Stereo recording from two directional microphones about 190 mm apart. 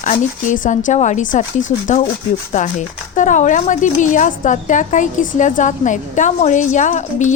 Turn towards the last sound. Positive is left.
turn(degrees=40)  # may be behind; listen again after turning